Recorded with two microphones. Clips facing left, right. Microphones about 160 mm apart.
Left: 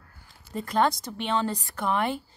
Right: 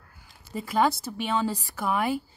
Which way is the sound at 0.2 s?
5° right (ahead or behind).